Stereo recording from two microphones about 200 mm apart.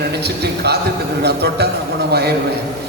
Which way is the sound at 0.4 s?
55° right (ahead or behind).